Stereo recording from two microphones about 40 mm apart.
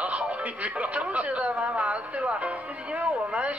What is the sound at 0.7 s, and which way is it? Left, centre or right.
Speech, right.